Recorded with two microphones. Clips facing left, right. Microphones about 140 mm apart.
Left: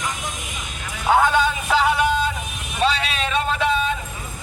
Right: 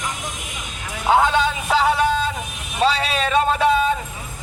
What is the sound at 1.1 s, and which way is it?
A man's voice, 25° right (ahead or behind).